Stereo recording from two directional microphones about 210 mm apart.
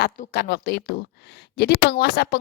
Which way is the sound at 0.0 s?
50° left (ahead or behind).